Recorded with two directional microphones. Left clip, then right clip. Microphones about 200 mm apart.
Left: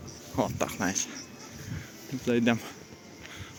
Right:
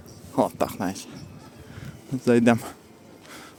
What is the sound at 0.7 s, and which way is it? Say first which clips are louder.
Speech: left 1 dB; 20° right (ahead or behind).